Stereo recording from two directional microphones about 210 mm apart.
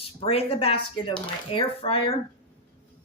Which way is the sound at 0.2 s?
25° left (ahead or behind).